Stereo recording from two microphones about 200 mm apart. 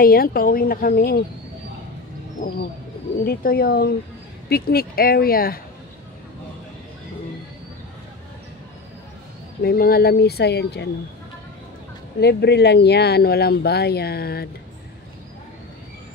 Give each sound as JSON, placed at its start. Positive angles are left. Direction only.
{"t": 0.0, "sound": "speech", "side_deg": 50}
{"t": 3.3, "sound": "speech", "side_deg": 50}
{"t": 9.6, "sound": "speech", "side_deg": 50}
{"t": 12.2, "sound": "speech", "side_deg": 55}